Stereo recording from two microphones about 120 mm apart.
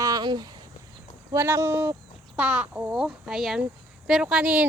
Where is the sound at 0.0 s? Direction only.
35° right (ahead or behind).